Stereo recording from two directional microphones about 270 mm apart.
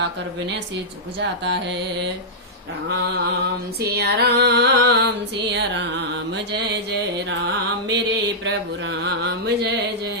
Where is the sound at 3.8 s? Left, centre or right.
Right.